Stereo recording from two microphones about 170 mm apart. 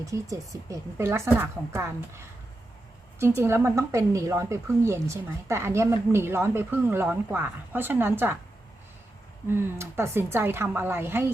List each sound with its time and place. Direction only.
0.0 s a woman's voice: 20° right (ahead or behind)
9.5 s a woman's voice: 15° right (ahead or behind)